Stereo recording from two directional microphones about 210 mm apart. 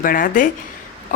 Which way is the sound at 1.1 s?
40° left (ahead or behind).